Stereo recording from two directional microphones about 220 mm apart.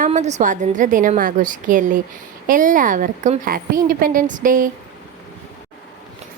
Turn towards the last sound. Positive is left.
turn(degrees=-40)  # may be behind; listen again after turning